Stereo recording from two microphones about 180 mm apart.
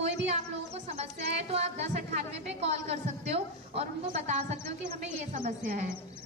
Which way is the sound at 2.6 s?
35° right (ahead or behind).